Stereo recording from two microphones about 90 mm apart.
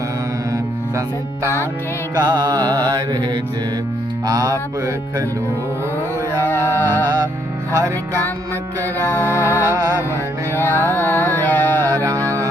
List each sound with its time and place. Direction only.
2.1 s music: 50° right (ahead or behind)
4.3 s music: 40° right (ahead or behind)
6.4 s music: 25° left (ahead or behind)
9.0 s music: 25° left (ahead or behind)
11.9 s music: 40° right (ahead or behind)